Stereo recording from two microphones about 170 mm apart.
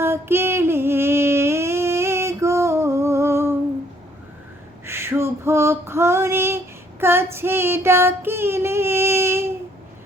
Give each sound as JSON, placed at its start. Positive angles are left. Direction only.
{"t": 0.0, "sound": "a sound", "side_deg": -15}
{"t": 4.9, "sound": "female singing", "side_deg": -15}
{"t": 7.0, "sound": "child singing", "side_deg": -15}